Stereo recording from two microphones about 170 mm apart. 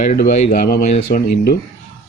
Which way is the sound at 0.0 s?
50° left (ahead or behind).